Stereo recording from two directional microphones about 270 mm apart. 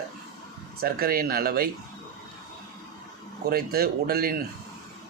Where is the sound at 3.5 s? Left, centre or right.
Right.